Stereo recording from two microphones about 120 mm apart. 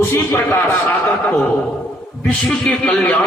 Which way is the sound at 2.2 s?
5° left (ahead or behind).